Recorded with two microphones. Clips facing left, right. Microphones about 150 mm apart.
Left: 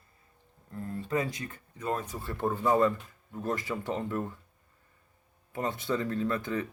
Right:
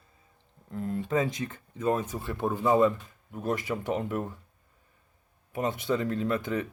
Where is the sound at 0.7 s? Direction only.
15° right (ahead or behind).